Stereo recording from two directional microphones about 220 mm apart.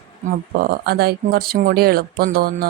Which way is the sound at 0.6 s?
45° right (ahead or behind).